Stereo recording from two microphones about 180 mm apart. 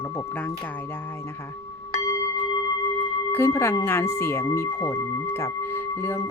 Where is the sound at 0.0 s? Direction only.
15° left (ahead or behind).